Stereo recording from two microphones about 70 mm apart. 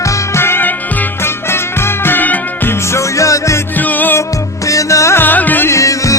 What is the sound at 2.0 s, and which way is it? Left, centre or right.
Music, left.